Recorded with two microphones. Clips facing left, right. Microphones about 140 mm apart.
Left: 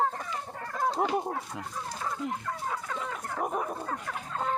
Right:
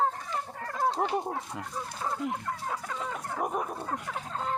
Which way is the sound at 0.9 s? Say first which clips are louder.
Left 1 dB; 5° left (ahead or behind).